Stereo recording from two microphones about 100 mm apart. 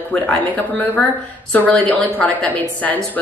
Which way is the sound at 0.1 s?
15° left (ahead or behind).